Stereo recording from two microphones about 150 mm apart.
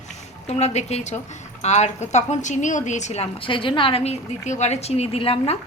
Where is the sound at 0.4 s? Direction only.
45° left (ahead or behind).